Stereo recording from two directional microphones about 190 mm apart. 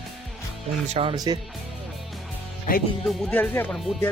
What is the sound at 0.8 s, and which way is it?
Speech, 30° right (ahead or behind).